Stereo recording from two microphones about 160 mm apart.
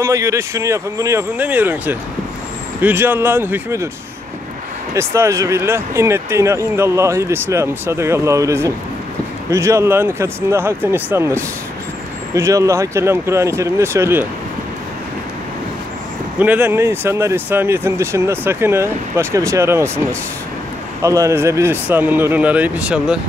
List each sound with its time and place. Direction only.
0.0 s speech: 20° right (ahead or behind)
4.9 s speech: 15° right (ahead or behind)
16.3 s speech: 10° right (ahead or behind)